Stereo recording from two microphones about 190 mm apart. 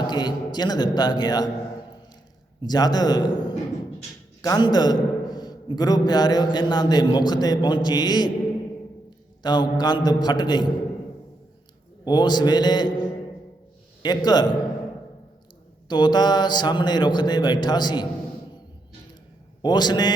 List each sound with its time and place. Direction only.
0.1 s a man's voice: 20° left (ahead or behind)
2.6 s a man's voice: 20° left (ahead or behind)
9.4 s a man's voice: 20° left (ahead or behind)
12.0 s a man's voice: 20° left (ahead or behind)
14.0 s a man's voice: 20° left (ahead or behind)
15.9 s a man's voice: 25° left (ahead or behind)
19.6 s a man's voice: 20° left (ahead or behind)